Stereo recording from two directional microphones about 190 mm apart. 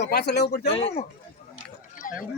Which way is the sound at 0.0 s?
60° left (ahead or behind).